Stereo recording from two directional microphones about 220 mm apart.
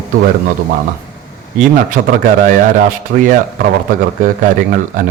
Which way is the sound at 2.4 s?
35° right (ahead or behind).